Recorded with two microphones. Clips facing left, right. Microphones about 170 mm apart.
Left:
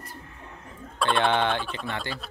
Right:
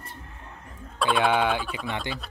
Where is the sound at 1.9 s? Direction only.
15° right (ahead or behind).